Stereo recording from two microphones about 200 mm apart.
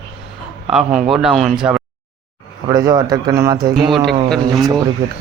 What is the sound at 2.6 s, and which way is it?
Speech, 20° right (ahead or behind).